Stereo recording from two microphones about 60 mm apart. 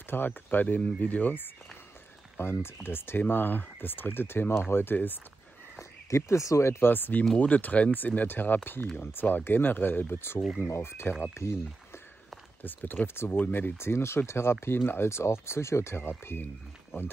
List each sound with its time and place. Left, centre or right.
0.1 s speech: left
5.8 s speech: left
6.9 s speech: left
12.6 s speech: left